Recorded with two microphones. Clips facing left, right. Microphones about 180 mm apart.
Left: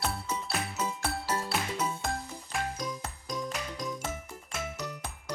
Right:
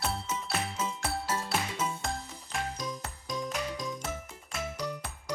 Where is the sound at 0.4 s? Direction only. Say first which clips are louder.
Even; 5° left (ahead or behind).